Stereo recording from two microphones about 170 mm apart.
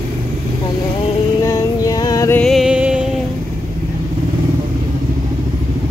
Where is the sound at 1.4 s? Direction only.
20° left (ahead or behind).